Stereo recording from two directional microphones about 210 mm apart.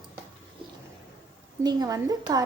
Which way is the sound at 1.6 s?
15° right (ahead or behind).